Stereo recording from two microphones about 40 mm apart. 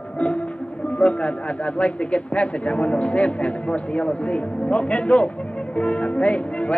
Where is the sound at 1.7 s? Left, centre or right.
Left.